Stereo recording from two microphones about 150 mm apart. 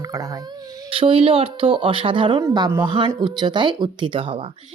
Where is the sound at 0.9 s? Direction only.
35° right (ahead or behind).